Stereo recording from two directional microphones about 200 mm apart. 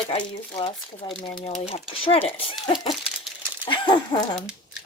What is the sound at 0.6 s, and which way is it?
Speech, 30° left (ahead or behind).